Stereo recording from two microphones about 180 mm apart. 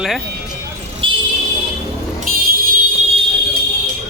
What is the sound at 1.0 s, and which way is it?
Vehicle, 30° right (ahead or behind).